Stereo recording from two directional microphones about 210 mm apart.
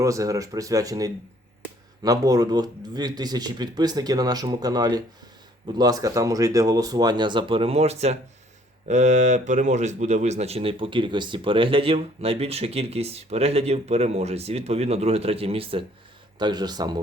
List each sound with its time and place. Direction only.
0.0 s speech: 15° right (ahead or behind)